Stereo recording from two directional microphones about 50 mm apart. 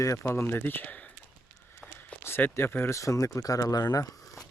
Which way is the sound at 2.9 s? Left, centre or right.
Left.